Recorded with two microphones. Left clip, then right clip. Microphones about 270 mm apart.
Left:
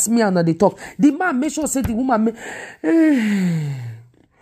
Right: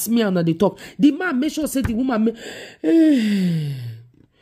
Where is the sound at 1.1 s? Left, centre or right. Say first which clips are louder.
Left 2 dB; centre.